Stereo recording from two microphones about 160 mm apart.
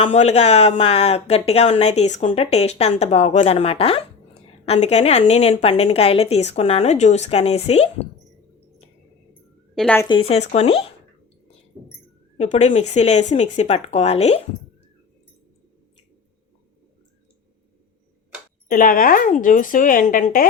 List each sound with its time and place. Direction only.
0.1 s speech: 45° left (ahead or behind)
9.7 s a woman's voice: 5° left (ahead or behind)
10.1 s speech: 35° left (ahead or behind)
12.4 s speech: 45° left (ahead or behind)
18.7 s speech: 60° left (ahead or behind)